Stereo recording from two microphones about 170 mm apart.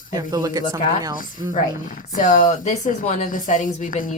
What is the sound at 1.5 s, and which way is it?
Speech, 50° left (ahead or behind).